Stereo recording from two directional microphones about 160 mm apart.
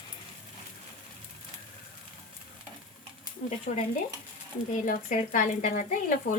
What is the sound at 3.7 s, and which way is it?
Speech, 55° left (ahead or behind).